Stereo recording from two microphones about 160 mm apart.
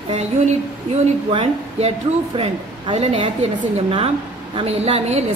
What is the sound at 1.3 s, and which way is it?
Speech, 40° right (ahead or behind).